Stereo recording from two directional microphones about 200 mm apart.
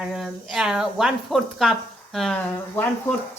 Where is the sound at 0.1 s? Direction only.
Centre (ahead or behind).